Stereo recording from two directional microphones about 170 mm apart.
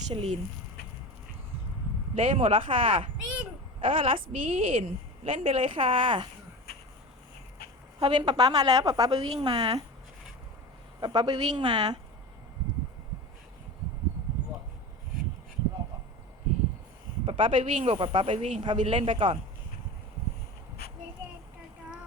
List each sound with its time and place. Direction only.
0.1 s a woman's voice: 35° right (ahead or behind)
2.1 s a woman's voice: 35° right (ahead or behind)
6.7 s a sound: 70° left (ahead or behind)
7.9 s a woman's voice: 25° right (ahead or behind)
11.0 s a woman's voice: 25° right (ahead or behind)
17.2 s a woman's voice: 30° right (ahead or behind)